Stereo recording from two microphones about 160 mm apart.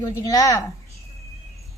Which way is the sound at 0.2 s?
20° left (ahead or behind).